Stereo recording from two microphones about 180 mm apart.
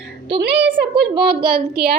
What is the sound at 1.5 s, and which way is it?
Child singing, 60° right (ahead or behind).